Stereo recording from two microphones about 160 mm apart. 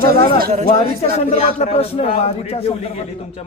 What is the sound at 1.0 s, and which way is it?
A man's voice, 45° left (ahead or behind).